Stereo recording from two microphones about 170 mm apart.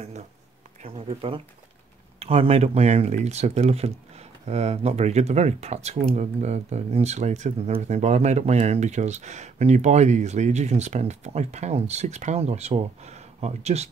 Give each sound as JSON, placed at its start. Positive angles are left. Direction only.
{"t": 0.8, "sound": "speech", "side_deg": -35}